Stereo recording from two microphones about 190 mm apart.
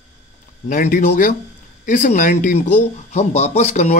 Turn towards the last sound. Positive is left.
turn(degrees=35)  # may be behind; listen again after turning